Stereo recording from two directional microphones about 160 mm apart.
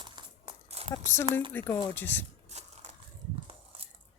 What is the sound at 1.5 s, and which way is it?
Speech, 10° left (ahead or behind).